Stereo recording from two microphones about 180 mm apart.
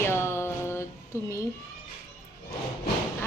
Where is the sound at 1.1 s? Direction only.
15° left (ahead or behind).